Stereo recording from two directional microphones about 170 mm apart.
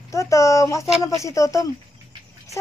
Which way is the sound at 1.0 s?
20° left (ahead or behind).